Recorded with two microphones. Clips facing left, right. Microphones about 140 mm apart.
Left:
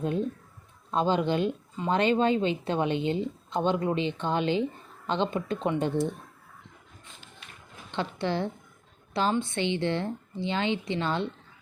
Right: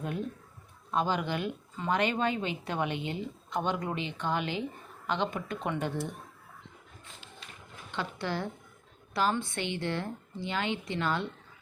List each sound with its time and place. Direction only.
0.0 s speech: 25° left (ahead or behind)
7.9 s speech: 25° left (ahead or behind)